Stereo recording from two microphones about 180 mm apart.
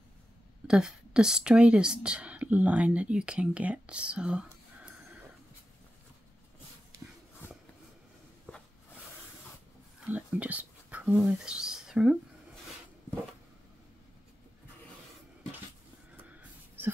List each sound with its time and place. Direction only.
0.7 s speech: 5° right (ahead or behind)
9.9 s whispering: 10° right (ahead or behind)